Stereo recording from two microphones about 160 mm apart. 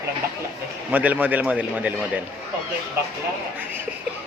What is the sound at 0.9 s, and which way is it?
A man's voice, 10° right (ahead or behind).